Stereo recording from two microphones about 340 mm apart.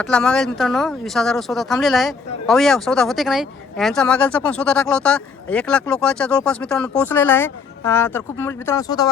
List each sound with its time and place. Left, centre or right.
0.0 s speech: centre